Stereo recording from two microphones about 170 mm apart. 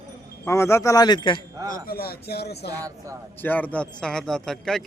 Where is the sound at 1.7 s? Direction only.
60° left (ahead or behind).